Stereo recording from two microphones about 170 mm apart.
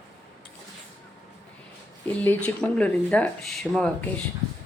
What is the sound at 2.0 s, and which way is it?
Speech, 10° left (ahead or behind).